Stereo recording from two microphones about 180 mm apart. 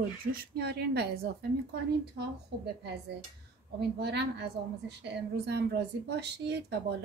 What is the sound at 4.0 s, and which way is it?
A woman's voice, 70° right (ahead or behind).